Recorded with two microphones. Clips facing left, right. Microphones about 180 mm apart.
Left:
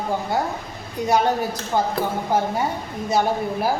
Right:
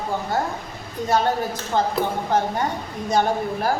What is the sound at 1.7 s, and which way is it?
Speech, 10° left (ahead or behind).